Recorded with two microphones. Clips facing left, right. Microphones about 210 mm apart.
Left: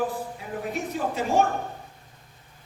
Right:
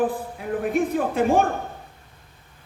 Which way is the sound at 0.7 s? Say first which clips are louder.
Right 7 dB; 55° right (ahead or behind).